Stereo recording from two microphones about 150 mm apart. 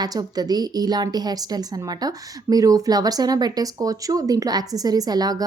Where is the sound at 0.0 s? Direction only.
25° right (ahead or behind).